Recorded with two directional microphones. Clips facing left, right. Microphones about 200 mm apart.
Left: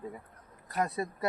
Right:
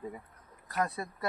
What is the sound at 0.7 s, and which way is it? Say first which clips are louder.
Speech: left 2 dB; 15° left (ahead or behind).